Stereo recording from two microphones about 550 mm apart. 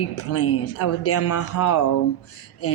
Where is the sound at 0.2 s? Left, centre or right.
Left.